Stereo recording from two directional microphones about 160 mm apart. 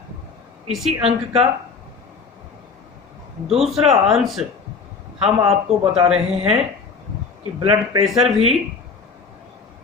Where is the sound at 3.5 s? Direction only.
Centre (ahead or behind).